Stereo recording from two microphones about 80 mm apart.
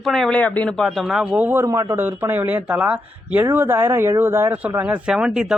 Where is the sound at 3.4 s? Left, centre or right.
Right.